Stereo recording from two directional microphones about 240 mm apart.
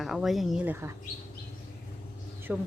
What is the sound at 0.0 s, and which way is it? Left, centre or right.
Speech, centre.